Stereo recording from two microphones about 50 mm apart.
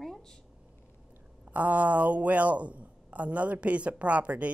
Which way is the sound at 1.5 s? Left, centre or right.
Right.